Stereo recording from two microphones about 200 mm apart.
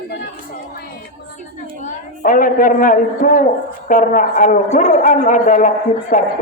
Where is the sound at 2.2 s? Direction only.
45° left (ahead or behind).